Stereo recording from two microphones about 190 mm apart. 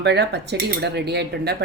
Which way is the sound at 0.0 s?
60° right (ahead or behind).